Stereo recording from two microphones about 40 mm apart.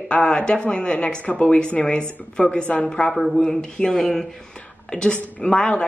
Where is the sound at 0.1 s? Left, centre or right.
Left.